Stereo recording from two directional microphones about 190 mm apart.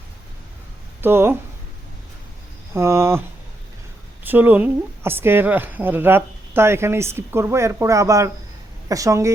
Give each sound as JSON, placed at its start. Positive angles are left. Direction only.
{"t": 1.0, "sound": "a woman's voice", "side_deg": -10}
{"t": 2.7, "sound": "a woman's voice", "side_deg": -15}